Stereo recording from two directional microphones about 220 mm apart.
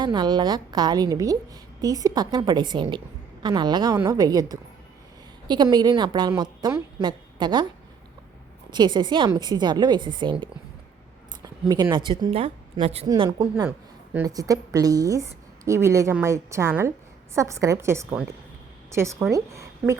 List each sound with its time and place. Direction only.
0.0 s a woman's voice: 20° right (ahead or behind)
8.7 s a woman's voice: 20° right (ahead or behind)